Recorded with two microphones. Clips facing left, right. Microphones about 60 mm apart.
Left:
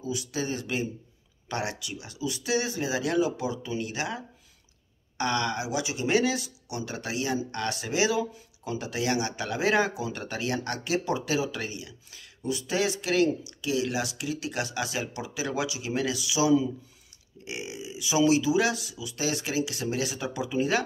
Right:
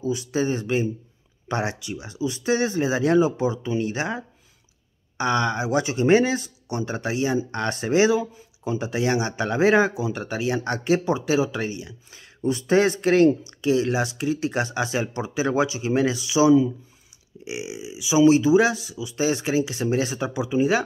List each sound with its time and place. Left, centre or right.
0.0 s speech: right
5.7 s speech: right; by 18.2 s centre
18.2 s speech: right